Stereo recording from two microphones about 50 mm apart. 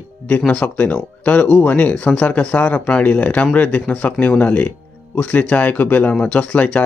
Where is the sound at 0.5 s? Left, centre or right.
Left.